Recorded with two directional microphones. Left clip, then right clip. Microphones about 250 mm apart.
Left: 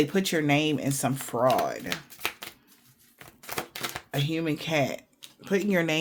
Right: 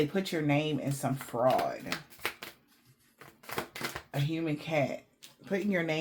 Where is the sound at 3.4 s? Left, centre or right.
Left.